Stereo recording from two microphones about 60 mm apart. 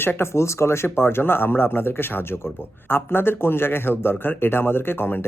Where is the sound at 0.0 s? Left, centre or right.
Left.